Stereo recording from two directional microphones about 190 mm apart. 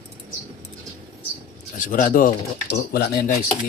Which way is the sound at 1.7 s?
45° left (ahead or behind).